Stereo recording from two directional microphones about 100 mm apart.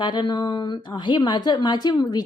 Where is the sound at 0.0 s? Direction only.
50° left (ahead or behind).